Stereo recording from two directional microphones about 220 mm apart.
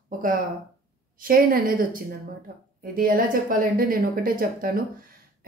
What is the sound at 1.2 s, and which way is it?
Speech, 40° right (ahead or behind).